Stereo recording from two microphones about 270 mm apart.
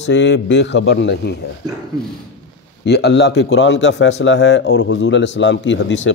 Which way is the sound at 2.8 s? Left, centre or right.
Left.